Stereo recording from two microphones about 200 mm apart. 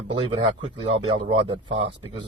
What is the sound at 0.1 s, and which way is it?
Speech, 25° right (ahead or behind).